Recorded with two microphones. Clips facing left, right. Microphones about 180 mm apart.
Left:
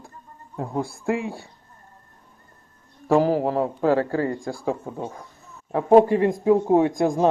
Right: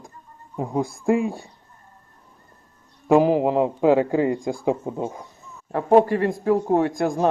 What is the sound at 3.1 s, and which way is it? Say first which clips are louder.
A man's voice: right 2 dB; 15° right (ahead or behind).